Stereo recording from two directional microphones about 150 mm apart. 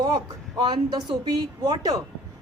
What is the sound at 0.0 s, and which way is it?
A woman's voice, 25° right (ahead or behind).